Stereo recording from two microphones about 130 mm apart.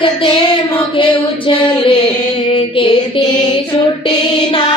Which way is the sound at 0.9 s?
40° left (ahead or behind).